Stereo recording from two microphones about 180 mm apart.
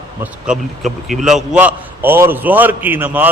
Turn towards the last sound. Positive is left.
turn(degrees=-10)  # may be behind; listen again after turning